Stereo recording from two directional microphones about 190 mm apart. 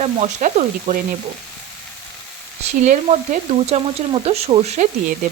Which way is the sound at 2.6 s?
35° right (ahead or behind).